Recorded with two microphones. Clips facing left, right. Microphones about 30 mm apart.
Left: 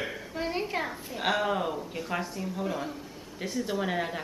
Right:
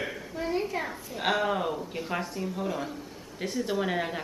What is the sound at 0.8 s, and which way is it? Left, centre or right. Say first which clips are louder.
A woman's voice: even; centre.